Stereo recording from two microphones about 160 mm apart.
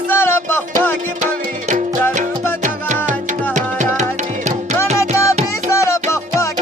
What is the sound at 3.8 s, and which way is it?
Music, 50° right (ahead or behind).